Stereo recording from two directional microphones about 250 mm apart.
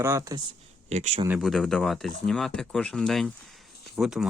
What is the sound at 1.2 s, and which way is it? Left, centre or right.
Speech, centre.